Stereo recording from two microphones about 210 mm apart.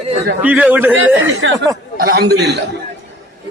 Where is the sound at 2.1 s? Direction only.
50° right (ahead or behind).